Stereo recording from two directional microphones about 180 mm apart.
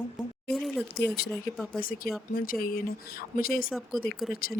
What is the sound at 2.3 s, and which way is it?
A woman's voice, 55° left (ahead or behind).